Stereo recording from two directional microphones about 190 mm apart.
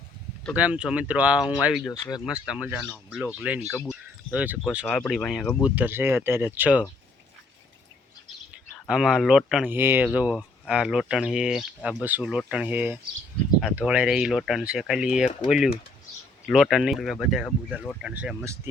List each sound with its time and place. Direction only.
0.5 s speech: 5° right (ahead or behind)
1.8 s speech: 20° left (ahead or behind)
2.2 s speech: 5° right (ahead or behind)
5.6 s speech: 10° right (ahead or behind)
8.9 s speech: 5° right (ahead or behind)